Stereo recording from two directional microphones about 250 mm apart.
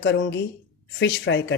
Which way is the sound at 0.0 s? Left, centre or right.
Left.